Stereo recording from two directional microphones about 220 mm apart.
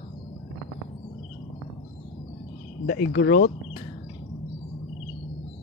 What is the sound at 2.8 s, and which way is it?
Speech, 45° left (ahead or behind).